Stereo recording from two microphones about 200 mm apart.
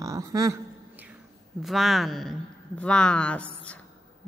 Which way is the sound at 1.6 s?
Centre (ahead or behind).